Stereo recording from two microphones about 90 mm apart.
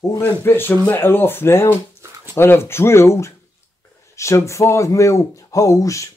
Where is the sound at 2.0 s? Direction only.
25° right (ahead or behind).